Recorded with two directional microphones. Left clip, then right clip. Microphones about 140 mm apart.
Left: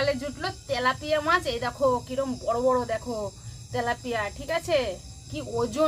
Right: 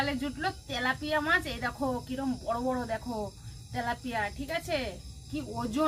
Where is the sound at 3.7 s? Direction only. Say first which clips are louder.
Left 5 dB; 20° left (ahead or behind).